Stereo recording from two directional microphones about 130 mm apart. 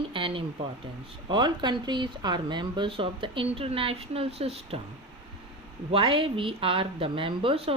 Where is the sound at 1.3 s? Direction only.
35° right (ahead or behind); by 4.8 s 50° right (ahead or behind).